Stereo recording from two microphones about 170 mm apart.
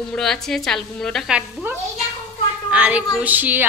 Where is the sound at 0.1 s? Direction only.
5° left (ahead or behind).